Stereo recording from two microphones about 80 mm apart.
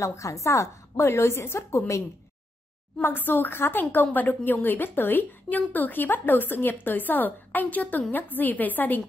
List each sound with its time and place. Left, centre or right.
0.0 s a woman's voice: left
3.0 s a woman's voice: left